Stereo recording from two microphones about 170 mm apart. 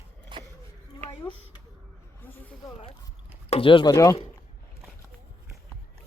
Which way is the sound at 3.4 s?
35° left (ahead or behind).